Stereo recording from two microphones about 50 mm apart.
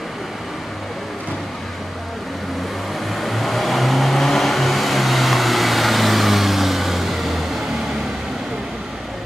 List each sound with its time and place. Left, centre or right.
3.2 s vehicle: centre